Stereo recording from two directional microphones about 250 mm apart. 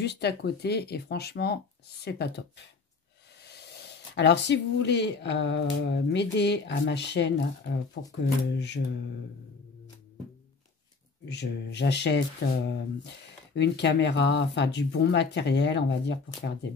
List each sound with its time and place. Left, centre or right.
0.0 s speech: left
4.1 s speech: left
11.2 s speech: left